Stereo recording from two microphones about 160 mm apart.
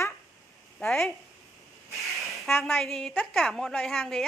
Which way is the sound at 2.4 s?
Centre (ahead or behind).